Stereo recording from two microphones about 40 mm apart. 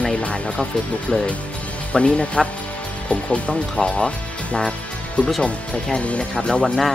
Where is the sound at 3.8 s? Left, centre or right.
Left.